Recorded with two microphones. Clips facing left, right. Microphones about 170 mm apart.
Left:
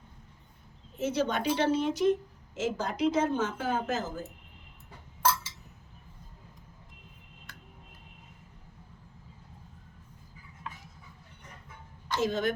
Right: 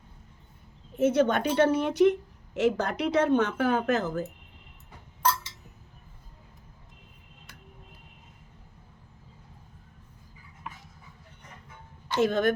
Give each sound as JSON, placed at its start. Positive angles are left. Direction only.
{"t": 0.9, "sound": "speech", "side_deg": -55}
{"t": 12.1, "sound": "speech", "side_deg": -60}